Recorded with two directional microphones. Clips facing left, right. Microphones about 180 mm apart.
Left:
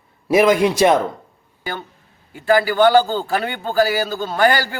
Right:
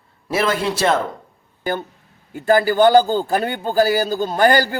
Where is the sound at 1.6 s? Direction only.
45° right (ahead or behind).